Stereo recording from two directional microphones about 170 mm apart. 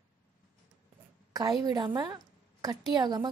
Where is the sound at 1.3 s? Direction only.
25° right (ahead or behind).